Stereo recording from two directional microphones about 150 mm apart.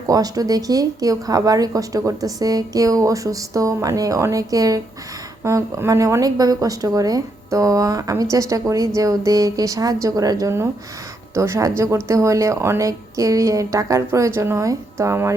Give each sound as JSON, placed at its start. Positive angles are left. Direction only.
{"t": 0.1, "sound": "speech", "side_deg": -25}